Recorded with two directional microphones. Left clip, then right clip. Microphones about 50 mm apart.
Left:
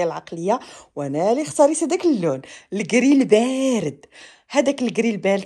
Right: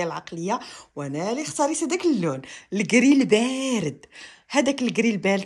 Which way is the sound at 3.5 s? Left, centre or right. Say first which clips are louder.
Left 5 dB; centre.